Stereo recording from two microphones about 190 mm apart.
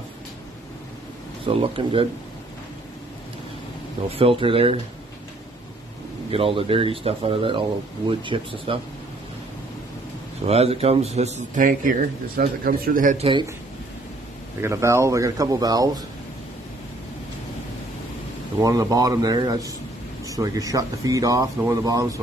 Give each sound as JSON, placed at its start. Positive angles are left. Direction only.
{"t": 1.4, "sound": "speech", "side_deg": -30}
{"t": 4.2, "sound": "speech", "side_deg": -30}
{"t": 6.3, "sound": "speech", "side_deg": -30}
{"t": 10.4, "sound": "speech", "side_deg": -30}
{"t": 14.6, "sound": "speech", "side_deg": -15}
{"t": 18.6, "sound": "speech", "side_deg": -20}